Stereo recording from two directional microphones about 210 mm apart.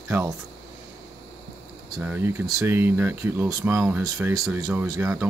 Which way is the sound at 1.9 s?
10° right (ahead or behind).